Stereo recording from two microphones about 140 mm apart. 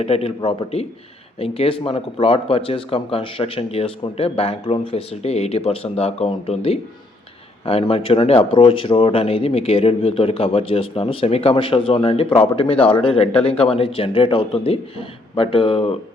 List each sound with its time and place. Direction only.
0.0 s speech: 45° left (ahead or behind)